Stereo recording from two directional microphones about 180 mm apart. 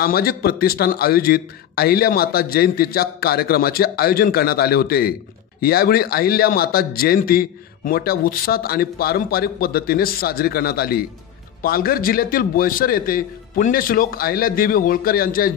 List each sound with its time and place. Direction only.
0.0 s a man's voice: 55° left (ahead or behind)